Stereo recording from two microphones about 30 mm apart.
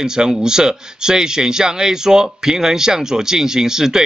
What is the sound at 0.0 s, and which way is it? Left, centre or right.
Speech, right.